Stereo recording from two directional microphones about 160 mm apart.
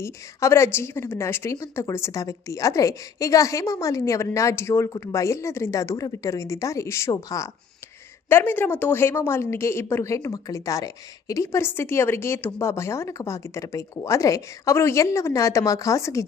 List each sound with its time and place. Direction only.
0.0 s a woman's voice: 20° left (ahead or behind)